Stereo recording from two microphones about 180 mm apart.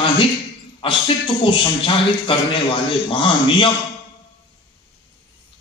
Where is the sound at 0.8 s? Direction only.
30° left (ahead or behind).